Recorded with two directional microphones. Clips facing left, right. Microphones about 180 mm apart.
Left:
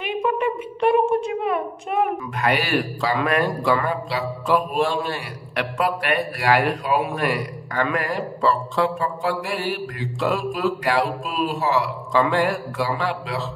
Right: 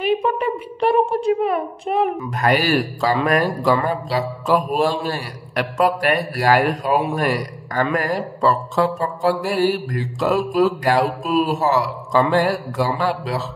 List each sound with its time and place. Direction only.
0.0 s a child's voice: 35° right (ahead or behind)